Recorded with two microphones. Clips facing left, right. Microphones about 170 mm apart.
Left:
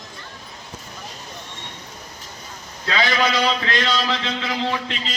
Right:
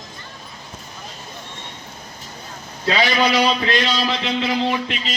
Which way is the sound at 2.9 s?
20° right (ahead or behind).